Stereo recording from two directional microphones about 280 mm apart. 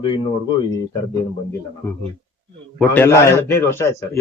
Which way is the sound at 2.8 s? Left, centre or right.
Centre.